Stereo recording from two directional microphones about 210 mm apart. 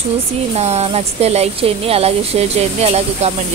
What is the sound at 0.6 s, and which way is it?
Speech, 30° right (ahead or behind).